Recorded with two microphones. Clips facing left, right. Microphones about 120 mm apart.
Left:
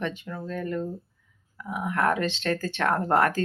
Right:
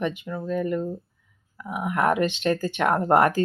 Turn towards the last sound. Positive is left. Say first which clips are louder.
# right 4 dB
turn(degrees=-15)  # may be behind; listen again after turning